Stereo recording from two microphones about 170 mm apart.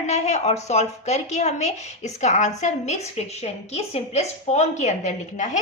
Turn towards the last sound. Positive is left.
turn(degrees=45)  # may be behind; listen again after turning